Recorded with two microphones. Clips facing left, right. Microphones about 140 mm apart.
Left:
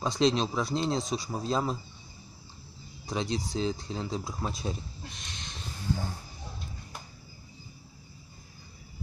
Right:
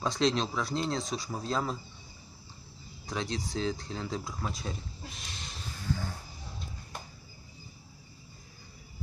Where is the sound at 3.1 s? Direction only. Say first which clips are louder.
Left 3 dB; 20° left (ahead or behind).